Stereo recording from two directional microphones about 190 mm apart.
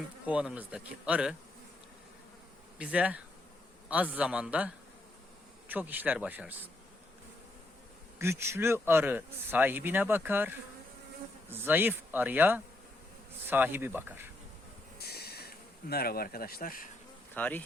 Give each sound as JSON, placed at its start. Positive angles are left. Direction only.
{"t": 0.3, "sound": "a man's voice", "side_deg": -5}
{"t": 2.7, "sound": "a man's voice", "side_deg": -5}
{"t": 8.2, "sound": "a man's voice", "side_deg": -15}
{"t": 14.9, "sound": "a sound", "side_deg": 55}
{"t": 15.9, "sound": "speech", "side_deg": 55}
{"t": 17.3, "sound": "insect", "side_deg": 10}